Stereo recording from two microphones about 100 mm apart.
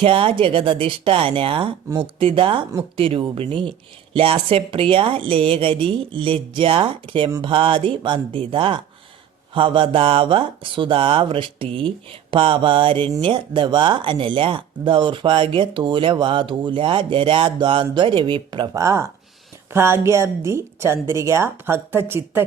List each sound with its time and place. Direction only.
0.0 s speech: 70° right (ahead or behind); by 18.7 s 50° right (ahead or behind)
18.7 s a woman's voice: 30° right (ahead or behind)